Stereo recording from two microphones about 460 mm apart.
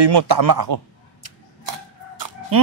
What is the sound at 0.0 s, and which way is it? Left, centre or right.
Speech, right.